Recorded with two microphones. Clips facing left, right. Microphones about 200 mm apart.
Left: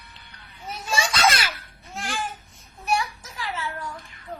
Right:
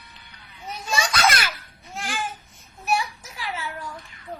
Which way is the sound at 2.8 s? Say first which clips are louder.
Even; 5° right (ahead or behind).